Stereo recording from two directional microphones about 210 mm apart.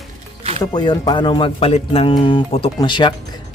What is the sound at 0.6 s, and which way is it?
Speech, 20° left (ahead or behind).